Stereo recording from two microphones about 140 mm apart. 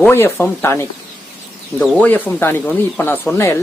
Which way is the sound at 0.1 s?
15° left (ahead or behind).